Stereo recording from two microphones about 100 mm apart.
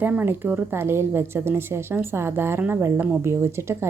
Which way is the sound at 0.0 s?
15° right (ahead or behind).